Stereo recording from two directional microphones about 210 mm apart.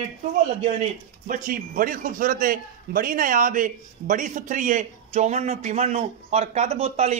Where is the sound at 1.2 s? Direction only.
40° right (ahead or behind).